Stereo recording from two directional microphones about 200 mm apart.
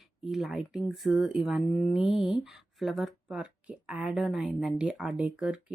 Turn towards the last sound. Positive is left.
turn(degrees=-5)  # may be behind; listen again after turning